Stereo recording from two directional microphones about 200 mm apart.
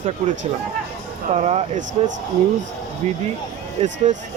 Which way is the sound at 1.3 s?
35° right (ahead or behind).